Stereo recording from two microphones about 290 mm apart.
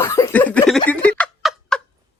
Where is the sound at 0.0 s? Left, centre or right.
Centre.